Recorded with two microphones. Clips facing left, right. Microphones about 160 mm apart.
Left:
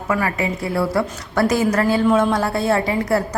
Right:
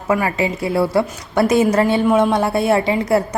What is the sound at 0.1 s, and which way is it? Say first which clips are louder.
A woman's voice: right 3 dB; 25° right (ahead or behind).